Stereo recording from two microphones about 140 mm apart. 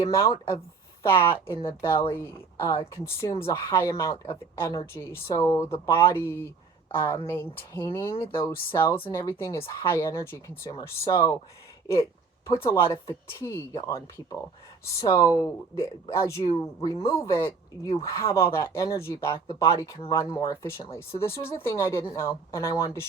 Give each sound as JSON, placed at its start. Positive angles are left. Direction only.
{"t": 0.0, "sound": "speech", "side_deg": 25}
{"t": 12.5, "sound": "speech", "side_deg": 20}